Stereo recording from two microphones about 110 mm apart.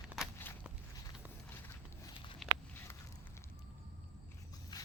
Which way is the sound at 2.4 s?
Centre (ahead or behind).